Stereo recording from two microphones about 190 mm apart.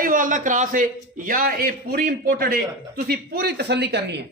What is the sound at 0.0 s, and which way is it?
A man's voice, 45° right (ahead or behind).